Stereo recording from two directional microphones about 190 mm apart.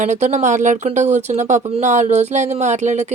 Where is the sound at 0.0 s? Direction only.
40° right (ahead or behind).